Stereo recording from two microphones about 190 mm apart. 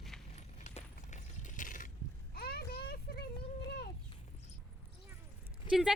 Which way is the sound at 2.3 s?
55° left (ahead or behind).